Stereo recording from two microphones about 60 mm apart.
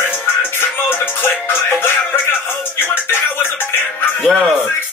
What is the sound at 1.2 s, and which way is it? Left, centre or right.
Music, left.